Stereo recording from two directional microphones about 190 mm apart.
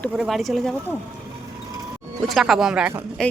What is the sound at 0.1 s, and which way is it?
Speech, centre (ahead or behind).